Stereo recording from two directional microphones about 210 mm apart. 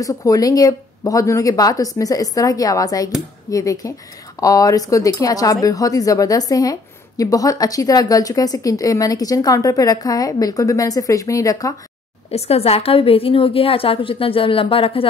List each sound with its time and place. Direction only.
0.0 s speech: 15° left (ahead or behind)
12.3 s a woman's voice: 30° left (ahead or behind)